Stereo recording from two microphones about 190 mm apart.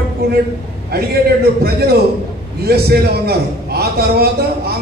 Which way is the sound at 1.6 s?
55° right (ahead or behind).